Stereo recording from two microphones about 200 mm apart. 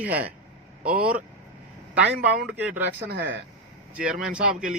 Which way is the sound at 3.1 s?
55° right (ahead or behind).